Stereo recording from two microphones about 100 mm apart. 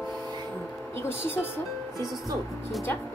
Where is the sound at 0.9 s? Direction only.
25° left (ahead or behind).